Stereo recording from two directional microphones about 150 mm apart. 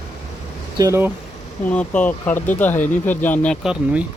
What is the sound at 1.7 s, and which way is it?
Speech, 10° left (ahead or behind).